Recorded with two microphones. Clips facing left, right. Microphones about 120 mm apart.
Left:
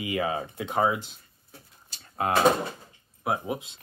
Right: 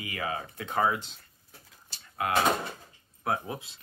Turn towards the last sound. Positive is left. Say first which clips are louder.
# left 3 dB
turn(degrees=20)  # may be behind; listen again after turning